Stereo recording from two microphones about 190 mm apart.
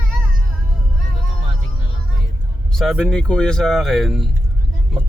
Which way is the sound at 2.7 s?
Centre (ahead or behind).